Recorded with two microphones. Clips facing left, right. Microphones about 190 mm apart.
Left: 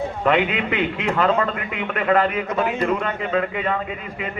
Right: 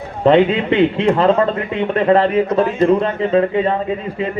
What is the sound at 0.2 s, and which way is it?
A man's voice, 30° right (ahead or behind).